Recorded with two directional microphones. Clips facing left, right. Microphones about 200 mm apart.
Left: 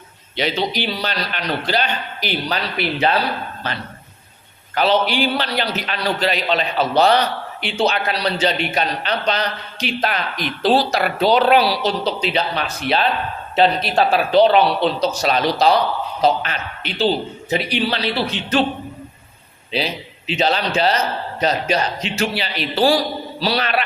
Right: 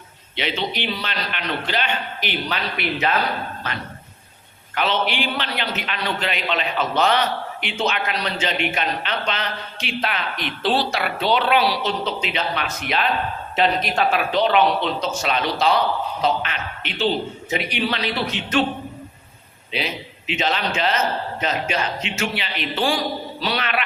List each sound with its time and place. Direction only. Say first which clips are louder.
0.3 s a man's voice: left 4 dB; 40° left (ahead or behind)
19.7 s a man's voice: left 4 dB; 35° left (ahead or behind)